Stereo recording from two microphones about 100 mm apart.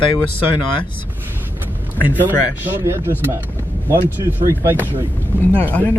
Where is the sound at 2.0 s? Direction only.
15° right (ahead or behind).